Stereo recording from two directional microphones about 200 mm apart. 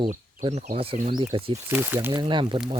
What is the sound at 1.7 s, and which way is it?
Speech, 10° right (ahead or behind).